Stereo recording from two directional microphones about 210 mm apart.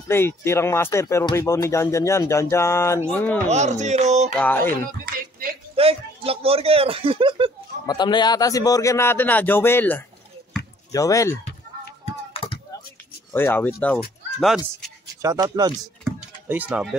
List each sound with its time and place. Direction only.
0.1 s speech: 10° left (ahead or behind)
3.4 s speech: 35° right (ahead or behind)
4.4 s speech: 10° left (ahead or behind)
5.8 s speech: 25° right (ahead or behind)
7.8 s speech: 20° left (ahead or behind)
13.3 s speech: 10° left (ahead or behind)
15.2 s speech: 15° right (ahead or behind)
16.0 s a sound: 5° right (ahead or behind)